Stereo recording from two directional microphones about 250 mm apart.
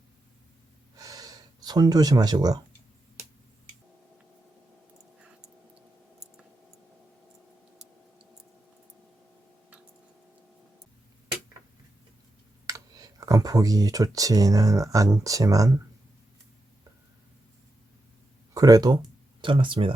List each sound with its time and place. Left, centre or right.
0.9 s gasp: centre
12.6 s speech: centre
18.5 s speech: centre